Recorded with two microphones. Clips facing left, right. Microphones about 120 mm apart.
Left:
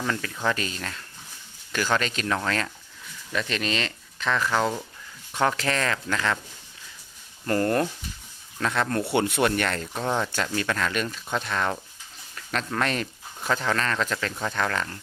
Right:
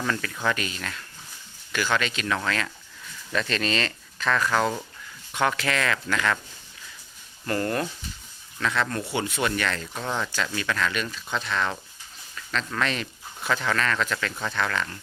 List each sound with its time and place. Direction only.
0.4 s speech: 35° left (ahead or behind)
3.3 s speech: 15° left (ahead or behind)
5.3 s speech: 35° left (ahead or behind)
7.4 s speech: 35° left (ahead or behind)
9.0 s speech: 60° left (ahead or behind); by 9.9 s 45° left (ahead or behind)
9.9 s speech: 20° left (ahead or behind)
10.3 s speech: 45° left (ahead or behind)
13.5 s speech: 35° left (ahead or behind)